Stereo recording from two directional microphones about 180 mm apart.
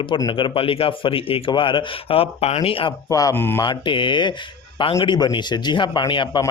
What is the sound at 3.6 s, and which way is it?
Speech, 25° left (ahead or behind).